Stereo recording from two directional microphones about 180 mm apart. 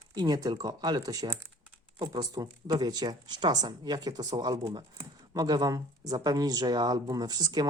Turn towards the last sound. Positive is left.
turn(degrees=-20)  # may be behind; listen again after turning